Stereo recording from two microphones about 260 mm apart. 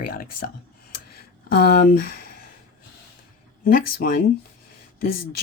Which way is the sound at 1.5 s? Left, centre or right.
Left.